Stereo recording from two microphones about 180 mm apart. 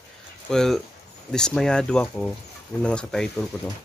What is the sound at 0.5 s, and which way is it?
Speech, centre (ahead or behind).